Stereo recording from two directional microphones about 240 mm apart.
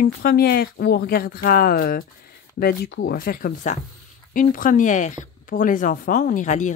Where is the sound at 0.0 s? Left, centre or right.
Left.